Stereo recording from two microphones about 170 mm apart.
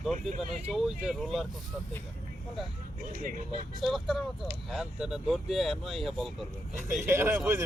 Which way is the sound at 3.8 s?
Centre (ahead or behind).